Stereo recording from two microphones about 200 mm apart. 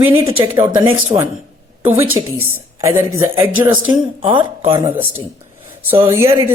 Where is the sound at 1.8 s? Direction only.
10° right (ahead or behind).